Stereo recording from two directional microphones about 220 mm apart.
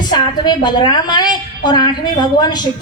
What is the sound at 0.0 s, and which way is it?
A woman's voice, 20° left (ahead or behind).